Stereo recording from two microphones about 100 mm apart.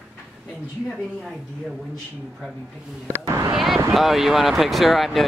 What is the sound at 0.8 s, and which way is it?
Speech, centre (ahead or behind).